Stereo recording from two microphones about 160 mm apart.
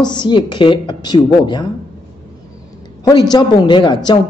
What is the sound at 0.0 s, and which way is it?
A man's voice, 30° left (ahead or behind).